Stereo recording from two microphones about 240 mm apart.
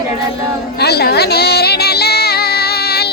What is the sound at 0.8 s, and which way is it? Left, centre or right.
Music, left.